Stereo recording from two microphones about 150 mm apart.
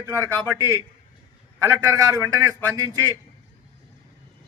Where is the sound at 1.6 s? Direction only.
20° right (ahead or behind).